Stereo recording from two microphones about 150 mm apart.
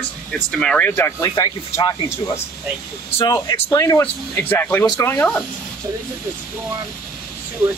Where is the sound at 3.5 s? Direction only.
15° left (ahead or behind).